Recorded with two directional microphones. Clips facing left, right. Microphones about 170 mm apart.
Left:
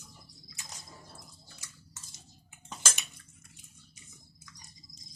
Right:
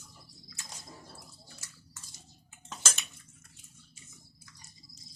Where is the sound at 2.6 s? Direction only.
10° left (ahead or behind).